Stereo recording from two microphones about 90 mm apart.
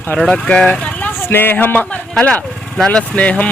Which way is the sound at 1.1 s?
25° left (ahead or behind).